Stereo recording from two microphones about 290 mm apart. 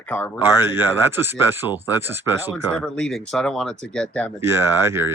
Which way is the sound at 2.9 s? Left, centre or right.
Centre.